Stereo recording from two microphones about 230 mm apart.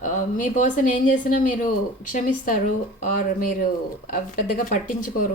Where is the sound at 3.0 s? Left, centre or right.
Left.